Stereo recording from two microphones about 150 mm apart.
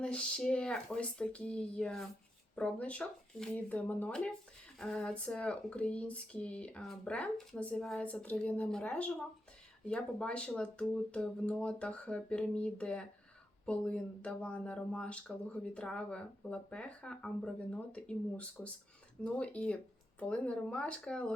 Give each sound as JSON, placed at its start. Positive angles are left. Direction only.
{"t": 0.0, "sound": "speech", "side_deg": 10}